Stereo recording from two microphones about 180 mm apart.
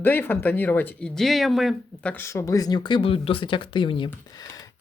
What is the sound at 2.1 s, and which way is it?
Speech, 15° left (ahead or behind).